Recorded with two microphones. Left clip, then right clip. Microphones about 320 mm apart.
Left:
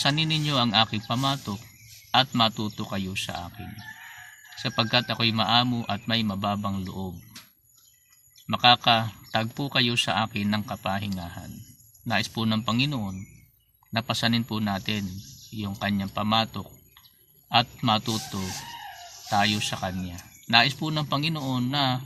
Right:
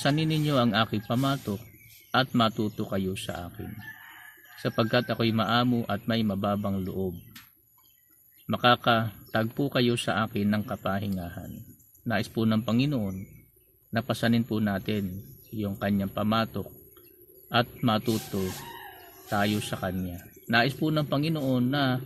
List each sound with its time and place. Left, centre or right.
0.0 s speech: left
4.5 s speech: left
8.4 s speech: left
19.3 s speech: left